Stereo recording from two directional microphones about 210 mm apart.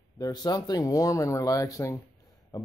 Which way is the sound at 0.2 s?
20° left (ahead or behind).